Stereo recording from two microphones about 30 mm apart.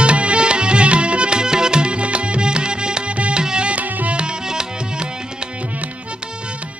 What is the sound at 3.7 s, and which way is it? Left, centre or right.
Music, right.